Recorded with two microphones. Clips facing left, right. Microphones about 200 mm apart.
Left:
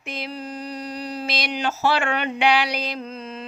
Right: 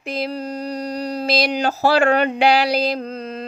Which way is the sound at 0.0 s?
35° right (ahead or behind).